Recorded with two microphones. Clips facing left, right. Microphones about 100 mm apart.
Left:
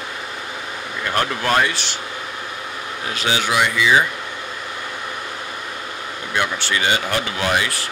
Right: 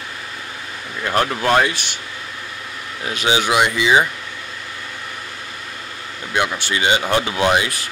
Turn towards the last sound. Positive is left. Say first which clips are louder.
# right 3 dB
turn(degrees=-20)  # may be behind; listen again after turning